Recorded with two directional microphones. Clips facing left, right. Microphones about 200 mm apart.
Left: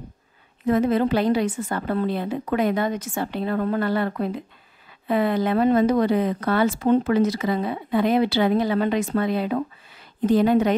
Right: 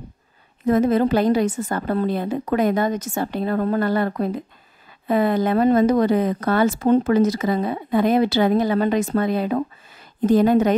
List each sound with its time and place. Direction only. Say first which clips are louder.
0.7 s speech: right 2 dB; 40° right (ahead or behind)